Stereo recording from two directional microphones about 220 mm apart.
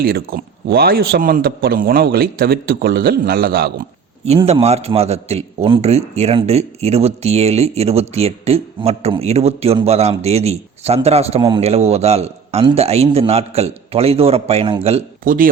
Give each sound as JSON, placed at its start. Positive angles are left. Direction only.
{"t": 0.0, "sound": "a man's voice", "side_deg": -40}
{"t": 4.3, "sound": "a man's voice", "side_deg": -25}